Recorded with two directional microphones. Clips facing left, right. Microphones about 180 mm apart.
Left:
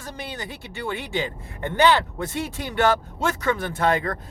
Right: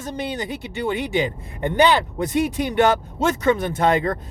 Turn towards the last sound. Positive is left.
turn(degrees=-20)  # may be behind; listen again after turning